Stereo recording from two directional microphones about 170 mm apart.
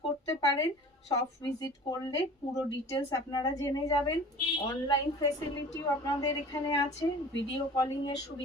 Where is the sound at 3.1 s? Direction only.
25° left (ahead or behind).